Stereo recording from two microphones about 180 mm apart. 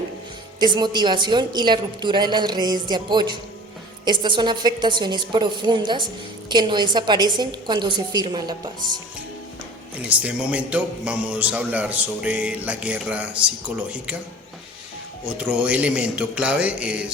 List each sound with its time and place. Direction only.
0.6 s a woman's voice: 25° right (ahead or behind)
10.0 s a man's voice: 10° right (ahead or behind)
15.3 s a man's voice: 5° right (ahead or behind)